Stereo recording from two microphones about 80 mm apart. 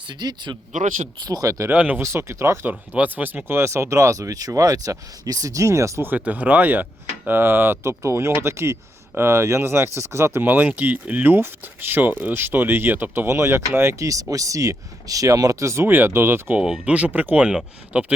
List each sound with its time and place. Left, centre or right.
0.1 s speech: right
1.2 s speech: right
1.5 s speech: right
1.7 s speech: centre
2.0 s speech: right
2.6 s speech: right
6.0 s speech: right
16.8 s speech: centre